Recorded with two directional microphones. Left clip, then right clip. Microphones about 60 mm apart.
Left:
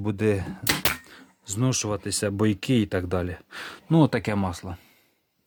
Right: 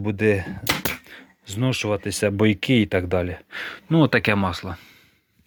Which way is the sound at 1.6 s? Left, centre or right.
Left.